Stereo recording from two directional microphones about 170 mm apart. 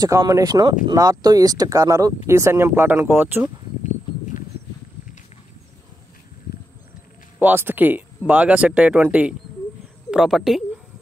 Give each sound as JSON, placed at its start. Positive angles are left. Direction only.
{"t": 0.0, "sound": "speech", "side_deg": -20}
{"t": 3.8, "sound": "horse", "side_deg": 45}
{"t": 7.3, "sound": "speech", "side_deg": -10}